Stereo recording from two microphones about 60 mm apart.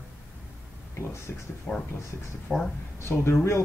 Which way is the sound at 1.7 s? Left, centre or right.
Centre.